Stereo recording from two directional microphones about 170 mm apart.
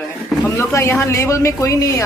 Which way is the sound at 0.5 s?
15° left (ahead or behind).